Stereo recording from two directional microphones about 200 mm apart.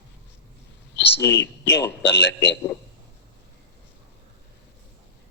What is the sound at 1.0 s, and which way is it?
A man's voice, 60° left (ahead or behind).